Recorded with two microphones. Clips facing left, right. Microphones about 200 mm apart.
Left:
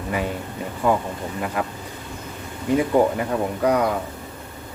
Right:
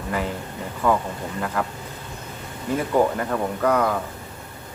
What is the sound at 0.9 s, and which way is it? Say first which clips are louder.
Speech: left 1 dB; 15° left (ahead or behind).